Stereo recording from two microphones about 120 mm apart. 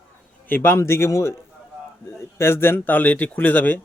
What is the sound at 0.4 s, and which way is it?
A man's voice, 15° left (ahead or behind).